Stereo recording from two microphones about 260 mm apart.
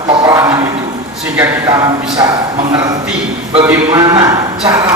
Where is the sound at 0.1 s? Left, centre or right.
Centre.